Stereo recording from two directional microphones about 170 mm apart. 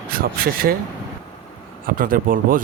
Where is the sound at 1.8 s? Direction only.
55° right (ahead or behind).